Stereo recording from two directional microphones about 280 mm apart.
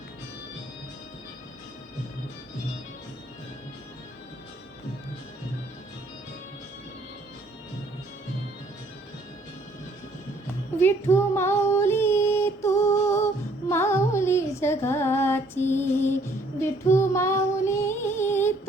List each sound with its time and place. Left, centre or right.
10.8 s child singing: centre